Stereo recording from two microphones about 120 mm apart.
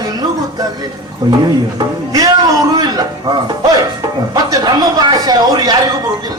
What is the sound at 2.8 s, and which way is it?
Speech, 35° right (ahead or behind).